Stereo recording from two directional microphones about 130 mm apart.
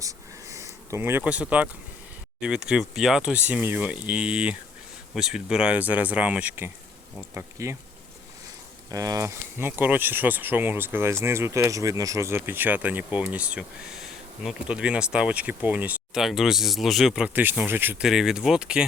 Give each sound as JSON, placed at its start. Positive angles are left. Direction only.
{"t": 0.0, "sound": "a sound", "side_deg": -25}
{"t": 2.4, "sound": "speech", "side_deg": -5}
{"t": 7.3, "sound": "speech", "side_deg": -20}
{"t": 8.9, "sound": "speech", "side_deg": -25}
{"t": 18.0, "sound": "speech", "side_deg": -5}